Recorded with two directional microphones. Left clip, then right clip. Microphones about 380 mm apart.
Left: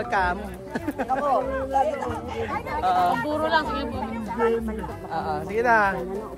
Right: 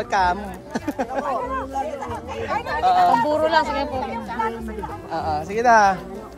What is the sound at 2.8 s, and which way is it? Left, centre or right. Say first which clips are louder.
Speech: right 5 dB; centre.